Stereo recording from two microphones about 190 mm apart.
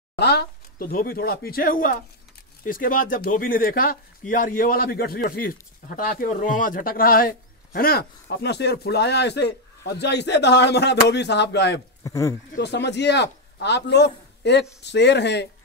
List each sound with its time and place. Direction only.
0.1 s a man's voice: 60° left (ahead or behind)
12.0 s speech: 15° left (ahead or behind)
12.5 s a man's voice: 65° left (ahead or behind)